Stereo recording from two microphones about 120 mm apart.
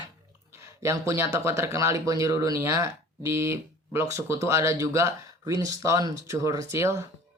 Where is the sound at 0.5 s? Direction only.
25° right (ahead or behind).